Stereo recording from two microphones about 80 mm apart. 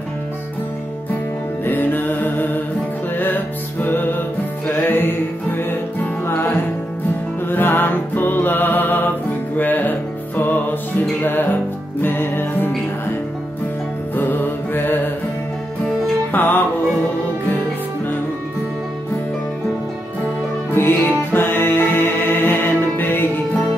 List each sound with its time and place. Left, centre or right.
1.6 s music: left
14.1 s mantra: left
16.3 s music: left
20.7 s music: left